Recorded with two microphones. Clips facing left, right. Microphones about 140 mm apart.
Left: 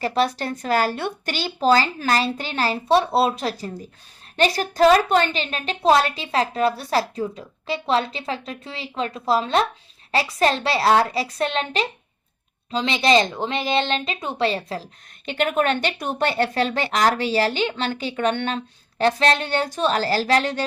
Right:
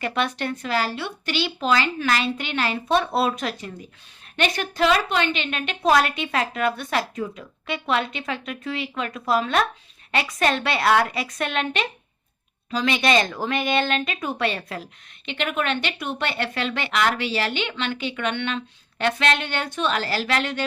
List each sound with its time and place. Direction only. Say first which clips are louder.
0.0 s speech: left 3 dB; 35° left (ahead or behind)
15.3 s speech: left 5 dB; 40° left (ahead or behind)